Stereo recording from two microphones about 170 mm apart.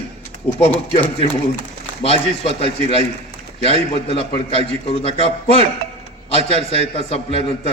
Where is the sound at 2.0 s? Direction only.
35° left (ahead or behind).